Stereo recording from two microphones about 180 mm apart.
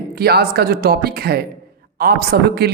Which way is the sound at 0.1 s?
60° right (ahead or behind).